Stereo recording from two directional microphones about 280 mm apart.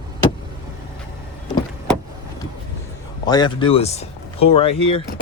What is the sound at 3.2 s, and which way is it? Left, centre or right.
Speech, centre.